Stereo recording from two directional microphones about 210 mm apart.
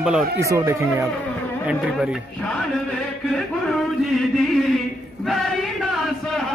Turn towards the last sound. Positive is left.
turn(degrees=0)  # may be behind; listen again after turning